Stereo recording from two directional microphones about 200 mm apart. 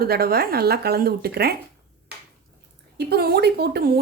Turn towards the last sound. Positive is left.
turn(degrees=-55)  # may be behind; listen again after turning